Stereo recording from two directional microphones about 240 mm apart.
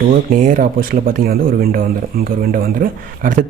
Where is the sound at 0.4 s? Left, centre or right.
Right.